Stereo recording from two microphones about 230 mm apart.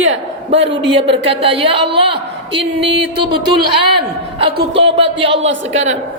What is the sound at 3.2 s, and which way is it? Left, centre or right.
Music, right.